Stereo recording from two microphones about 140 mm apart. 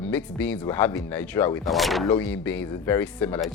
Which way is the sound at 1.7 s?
Centre (ahead or behind).